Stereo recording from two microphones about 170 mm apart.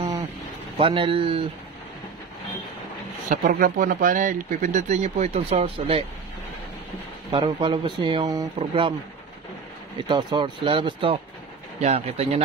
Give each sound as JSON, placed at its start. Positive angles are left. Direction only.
{"t": 0.7, "sound": "a man's voice", "side_deg": -35}
{"t": 3.3, "sound": "speech", "side_deg": -55}
{"t": 7.2, "sound": "a man's voice", "side_deg": -30}
{"t": 10.0, "sound": "a man's voice", "side_deg": -25}